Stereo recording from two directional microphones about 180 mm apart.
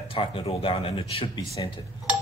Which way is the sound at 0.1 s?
30° left (ahead or behind).